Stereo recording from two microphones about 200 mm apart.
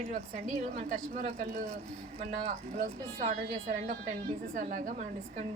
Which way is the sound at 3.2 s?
35° right (ahead or behind).